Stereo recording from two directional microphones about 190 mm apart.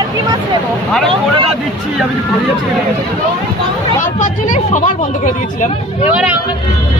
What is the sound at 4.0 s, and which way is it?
Vehicle, 40° left (ahead or behind).